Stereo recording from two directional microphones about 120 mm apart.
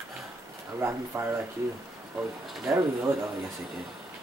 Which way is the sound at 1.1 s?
20° right (ahead or behind).